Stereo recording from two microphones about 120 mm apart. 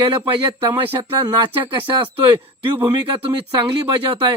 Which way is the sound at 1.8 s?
45° right (ahead or behind).